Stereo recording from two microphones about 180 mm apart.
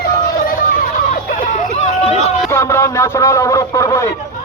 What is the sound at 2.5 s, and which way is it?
A man's voice, 15° left (ahead or behind).